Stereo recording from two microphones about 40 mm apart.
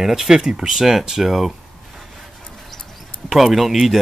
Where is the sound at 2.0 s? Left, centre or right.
Centre.